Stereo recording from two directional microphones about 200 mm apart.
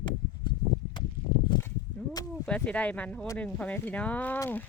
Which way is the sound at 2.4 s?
5° left (ahead or behind).